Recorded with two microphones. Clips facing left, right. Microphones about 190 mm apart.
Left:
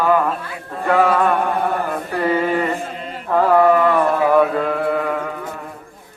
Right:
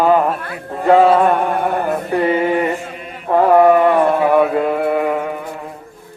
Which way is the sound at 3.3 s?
20° right (ahead or behind).